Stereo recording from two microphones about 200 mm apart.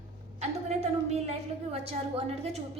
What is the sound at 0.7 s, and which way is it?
A woman's voice, 30° right (ahead or behind).